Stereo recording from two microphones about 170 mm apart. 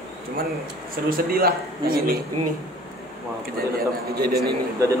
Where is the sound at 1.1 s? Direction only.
60° right (ahead or behind).